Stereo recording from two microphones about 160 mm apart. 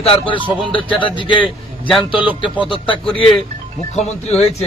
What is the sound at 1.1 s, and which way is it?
Speech, 30° left (ahead or behind).